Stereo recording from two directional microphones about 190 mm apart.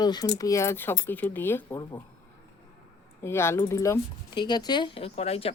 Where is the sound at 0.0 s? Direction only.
20° left (ahead or behind).